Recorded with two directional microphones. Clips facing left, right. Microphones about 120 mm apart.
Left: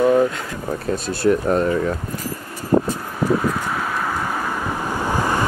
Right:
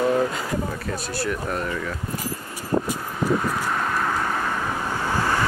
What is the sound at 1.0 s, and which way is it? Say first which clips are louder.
Speech: left 11 dB; 25° left (ahead or behind).